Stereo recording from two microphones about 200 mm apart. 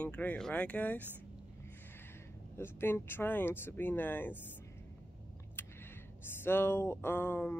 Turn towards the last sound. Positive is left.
turn(degrees=10)  # may be behind; listen again after turning